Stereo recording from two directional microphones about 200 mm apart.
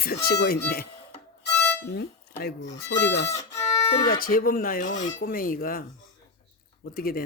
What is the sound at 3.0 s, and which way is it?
Speech, 55° left (ahead or behind).